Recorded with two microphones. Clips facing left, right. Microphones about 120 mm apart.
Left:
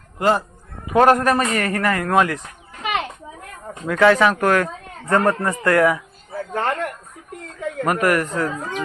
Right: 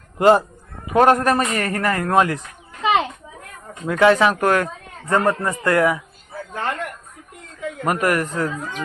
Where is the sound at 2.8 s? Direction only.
25° right (ahead or behind).